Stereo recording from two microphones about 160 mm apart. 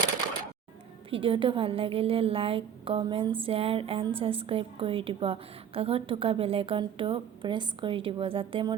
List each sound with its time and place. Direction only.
1.1 s a woman's voice: 35° right (ahead or behind)